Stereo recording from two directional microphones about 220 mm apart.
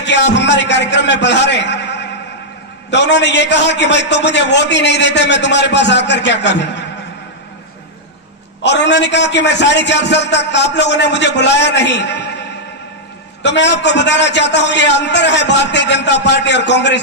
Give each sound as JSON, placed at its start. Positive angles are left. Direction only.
{"t": 0.0, "sound": "a man's voice", "side_deg": 50}
{"t": 8.6, "sound": "a man's voice", "side_deg": 50}
{"t": 13.4, "sound": "a man's voice", "side_deg": 50}